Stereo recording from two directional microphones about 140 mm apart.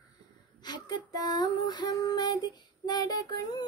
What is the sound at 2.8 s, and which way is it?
Child singing, 30° left (ahead or behind).